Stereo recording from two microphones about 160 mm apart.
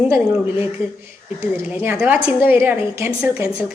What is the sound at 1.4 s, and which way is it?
A woman's voice, 10° right (ahead or behind).